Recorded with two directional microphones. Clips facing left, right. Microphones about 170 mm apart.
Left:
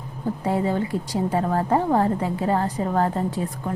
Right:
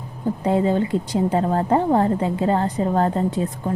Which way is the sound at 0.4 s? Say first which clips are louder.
Right 4 dB; 20° right (ahead or behind).